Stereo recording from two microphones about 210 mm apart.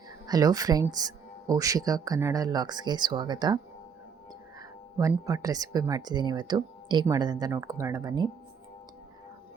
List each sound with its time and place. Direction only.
0.3 s speech: 15° right (ahead or behind)
4.9 s speech: 15° right (ahead or behind)